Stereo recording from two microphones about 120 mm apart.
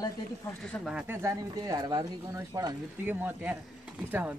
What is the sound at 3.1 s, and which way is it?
Speech, 15° right (ahead or behind).